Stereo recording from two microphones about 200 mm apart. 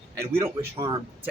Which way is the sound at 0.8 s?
15° right (ahead or behind).